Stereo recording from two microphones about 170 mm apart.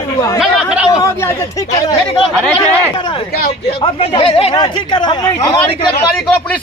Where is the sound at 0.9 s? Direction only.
20° left (ahead or behind).